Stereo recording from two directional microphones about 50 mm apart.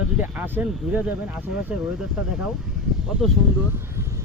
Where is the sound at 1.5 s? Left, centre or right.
Centre.